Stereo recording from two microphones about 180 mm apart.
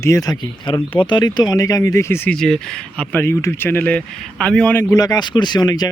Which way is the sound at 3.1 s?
15° left (ahead or behind).